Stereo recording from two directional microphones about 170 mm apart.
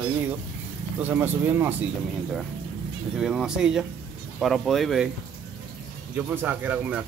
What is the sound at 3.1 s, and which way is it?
Speech, 5° right (ahead or behind).